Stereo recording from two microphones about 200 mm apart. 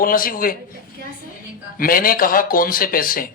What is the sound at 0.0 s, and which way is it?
Speech, 45° left (ahead or behind).